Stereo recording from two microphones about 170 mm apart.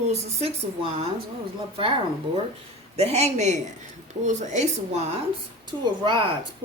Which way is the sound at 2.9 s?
40° right (ahead or behind).